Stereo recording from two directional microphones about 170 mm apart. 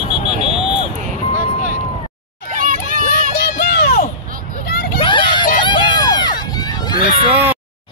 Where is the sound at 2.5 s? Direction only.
50° right (ahead or behind).